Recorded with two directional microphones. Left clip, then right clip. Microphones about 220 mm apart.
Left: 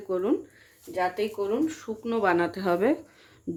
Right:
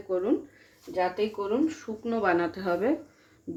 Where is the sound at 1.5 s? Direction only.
20° left (ahead or behind).